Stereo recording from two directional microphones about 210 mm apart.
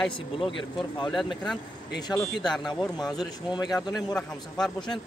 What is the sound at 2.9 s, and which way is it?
Speech, 20° left (ahead or behind).